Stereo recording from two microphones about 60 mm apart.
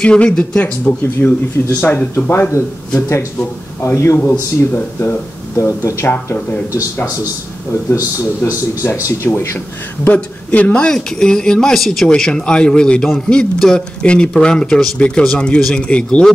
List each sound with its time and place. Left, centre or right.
0.0 s speech: centre
1.9 s speech: left
3.8 s speech: left
5.6 s speech: left
9.0 s speech: left
10.0 s a man's voice: left